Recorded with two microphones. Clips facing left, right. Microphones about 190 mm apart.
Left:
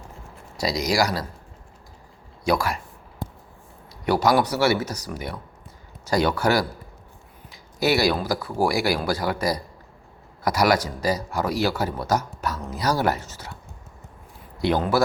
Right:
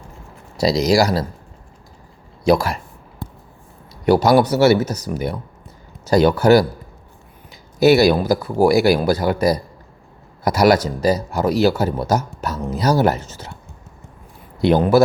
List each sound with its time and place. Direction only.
0.5 s a man's voice: 30° right (ahead or behind)
2.4 s speech: 25° right (ahead or behind)
4.0 s a man's voice: 25° right (ahead or behind)
14.6 s a man's voice: 20° right (ahead or behind)